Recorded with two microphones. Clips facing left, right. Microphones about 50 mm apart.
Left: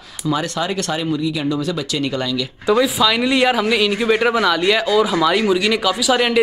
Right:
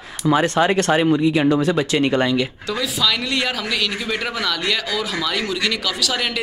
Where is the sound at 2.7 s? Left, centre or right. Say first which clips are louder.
Left 10 dB; centre.